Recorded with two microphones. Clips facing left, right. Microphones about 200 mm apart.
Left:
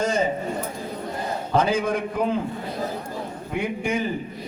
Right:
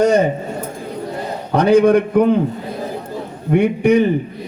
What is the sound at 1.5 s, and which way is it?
Speech, 70° right (ahead or behind).